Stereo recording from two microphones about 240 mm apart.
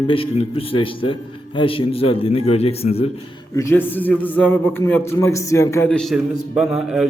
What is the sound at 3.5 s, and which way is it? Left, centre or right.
A man's voice, centre.